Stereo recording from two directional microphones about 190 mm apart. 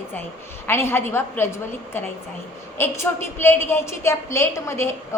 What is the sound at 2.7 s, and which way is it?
A woman's voice, 15° left (ahead or behind).